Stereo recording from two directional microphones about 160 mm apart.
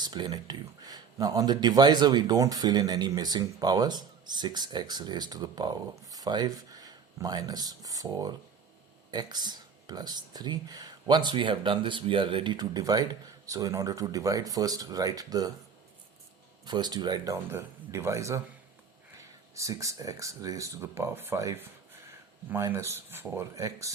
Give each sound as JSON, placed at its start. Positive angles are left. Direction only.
{"t": 0.0, "sound": "speech", "side_deg": -30}
{"t": 16.6, "sound": "speech", "side_deg": -25}
{"t": 19.5, "sound": "speech", "side_deg": -20}